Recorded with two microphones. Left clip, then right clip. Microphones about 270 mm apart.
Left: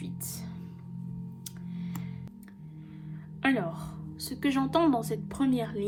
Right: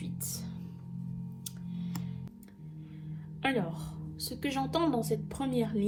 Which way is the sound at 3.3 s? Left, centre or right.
Left.